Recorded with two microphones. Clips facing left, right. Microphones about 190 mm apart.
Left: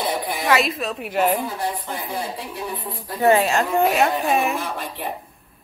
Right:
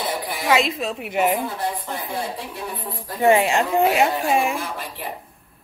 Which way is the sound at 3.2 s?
20° right (ahead or behind).